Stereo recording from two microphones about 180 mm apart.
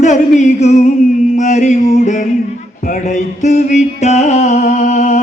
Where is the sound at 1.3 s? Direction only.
40° left (ahead or behind).